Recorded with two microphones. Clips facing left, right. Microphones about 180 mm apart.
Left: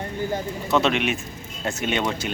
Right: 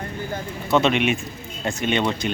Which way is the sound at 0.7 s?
Centre (ahead or behind).